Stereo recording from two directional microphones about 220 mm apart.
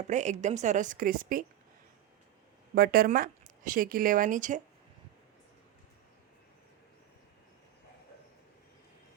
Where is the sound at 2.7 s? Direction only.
40° right (ahead or behind).